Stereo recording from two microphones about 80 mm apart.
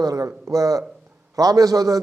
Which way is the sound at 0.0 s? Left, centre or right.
Right.